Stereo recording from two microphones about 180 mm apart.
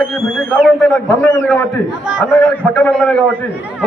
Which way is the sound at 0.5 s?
5° left (ahead or behind).